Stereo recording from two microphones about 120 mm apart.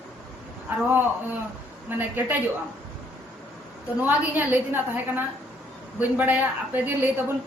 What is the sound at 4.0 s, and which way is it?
A woman's voice, 15° right (ahead or behind).